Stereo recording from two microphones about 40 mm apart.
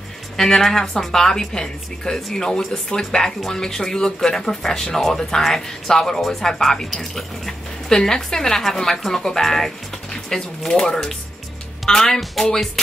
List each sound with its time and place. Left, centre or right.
0.4 s speech: centre